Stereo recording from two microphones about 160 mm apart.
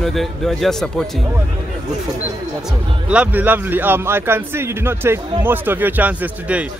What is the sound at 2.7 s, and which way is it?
A man's voice, 5° right (ahead or behind).